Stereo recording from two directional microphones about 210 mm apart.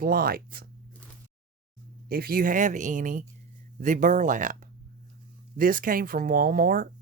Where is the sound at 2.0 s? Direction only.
45° right (ahead or behind).